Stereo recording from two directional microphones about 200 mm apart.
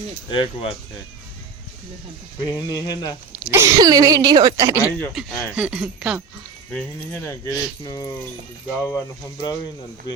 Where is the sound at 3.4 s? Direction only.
15° right (ahead or behind).